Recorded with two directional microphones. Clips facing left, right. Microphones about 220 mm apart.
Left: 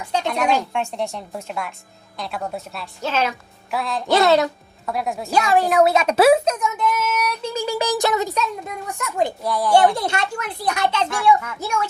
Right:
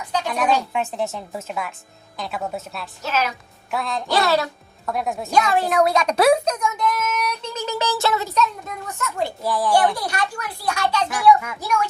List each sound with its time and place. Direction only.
0.0 s a sound: 25° left (ahead or behind)
0.3 s a woman's voice: 5° right (ahead or behind)
3.0 s speech: 30° left (ahead or behind)
3.7 s a woman's voice: centre (ahead or behind)
4.1 s speech: 20° left (ahead or behind)
4.9 s a woman's voice: centre (ahead or behind)
9.4 s a woman's voice: centre (ahead or behind)
9.7 s speech: 25° left (ahead or behind)